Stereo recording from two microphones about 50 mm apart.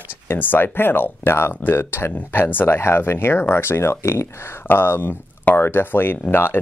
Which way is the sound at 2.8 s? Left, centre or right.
Left.